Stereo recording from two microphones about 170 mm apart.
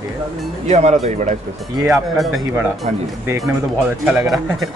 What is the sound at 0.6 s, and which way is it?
Speech, 40° right (ahead or behind).